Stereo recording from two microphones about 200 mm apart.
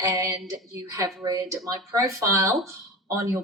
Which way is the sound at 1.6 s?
15° right (ahead or behind).